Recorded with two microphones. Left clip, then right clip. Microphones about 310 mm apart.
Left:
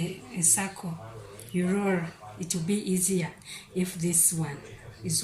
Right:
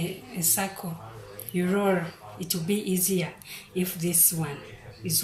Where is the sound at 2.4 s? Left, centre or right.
Right.